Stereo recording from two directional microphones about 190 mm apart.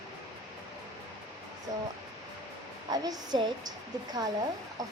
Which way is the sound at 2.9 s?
20° right (ahead or behind).